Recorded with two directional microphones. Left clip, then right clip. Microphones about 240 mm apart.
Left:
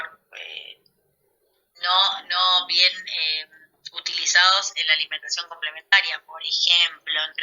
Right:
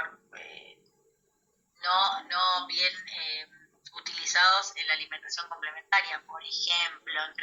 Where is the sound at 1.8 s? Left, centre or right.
Left.